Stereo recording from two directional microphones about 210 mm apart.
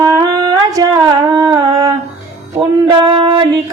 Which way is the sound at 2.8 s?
20° right (ahead or behind).